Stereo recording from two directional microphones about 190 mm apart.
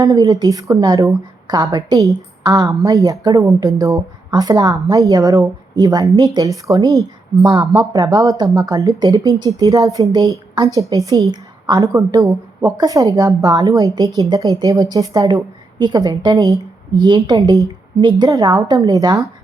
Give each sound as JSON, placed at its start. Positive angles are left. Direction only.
{"t": 0.0, "sound": "speech", "side_deg": -20}